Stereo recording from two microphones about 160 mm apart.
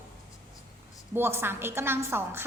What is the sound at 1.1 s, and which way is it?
A woman's voice, 15° right (ahead or behind).